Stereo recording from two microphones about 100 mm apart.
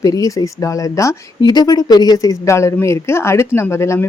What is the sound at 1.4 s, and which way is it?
Speech, 40° left (ahead or behind).